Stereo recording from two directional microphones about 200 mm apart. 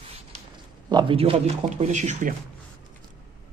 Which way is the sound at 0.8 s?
25° right (ahead or behind).